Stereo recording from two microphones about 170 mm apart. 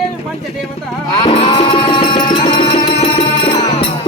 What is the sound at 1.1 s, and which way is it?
Music, 35° left (ahead or behind).